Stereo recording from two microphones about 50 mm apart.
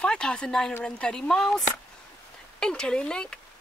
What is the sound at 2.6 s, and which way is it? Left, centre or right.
Speech, centre.